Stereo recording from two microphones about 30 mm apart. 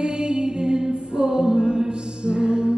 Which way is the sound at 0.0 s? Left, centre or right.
Right.